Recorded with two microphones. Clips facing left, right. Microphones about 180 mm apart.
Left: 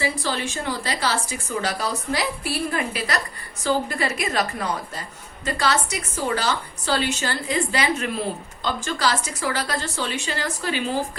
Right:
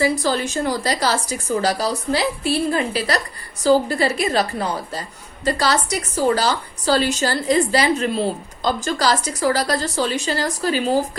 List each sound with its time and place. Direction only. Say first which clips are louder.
0.0 s a woman's voice: right 6 dB; 40° right (ahead or behind)